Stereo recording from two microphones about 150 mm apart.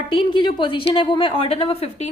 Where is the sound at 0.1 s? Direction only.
30° left (ahead or behind).